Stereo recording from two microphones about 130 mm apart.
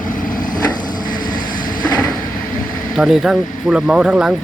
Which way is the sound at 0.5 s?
30° left (ahead or behind).